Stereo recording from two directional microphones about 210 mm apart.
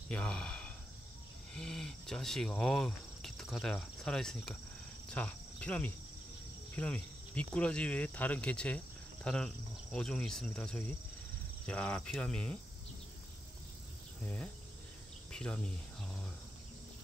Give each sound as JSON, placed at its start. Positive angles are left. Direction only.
{"t": 0.1, "sound": "speech", "side_deg": 5}
{"t": 5.1, "sound": "cricket", "side_deg": 5}
{"t": 6.7, "sound": "speech", "side_deg": 5}
{"t": 14.2, "sound": "speech", "side_deg": 5}